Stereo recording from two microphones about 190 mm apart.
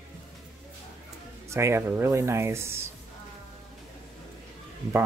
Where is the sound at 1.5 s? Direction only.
15° right (ahead or behind).